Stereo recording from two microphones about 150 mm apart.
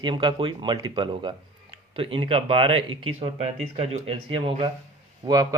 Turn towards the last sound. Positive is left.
turn(degrees=-25)  # may be behind; listen again after turning